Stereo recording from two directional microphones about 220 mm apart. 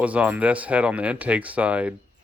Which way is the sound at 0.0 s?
5° right (ahead or behind).